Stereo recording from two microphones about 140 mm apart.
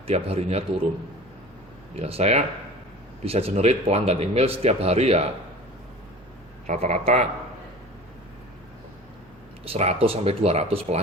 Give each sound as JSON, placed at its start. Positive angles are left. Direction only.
{"t": 0.1, "sound": "speech", "side_deg": -50}
{"t": 2.0, "sound": "speech", "side_deg": -45}
{"t": 6.7, "sound": "speech", "side_deg": -55}
{"t": 9.6, "sound": "speech", "side_deg": -45}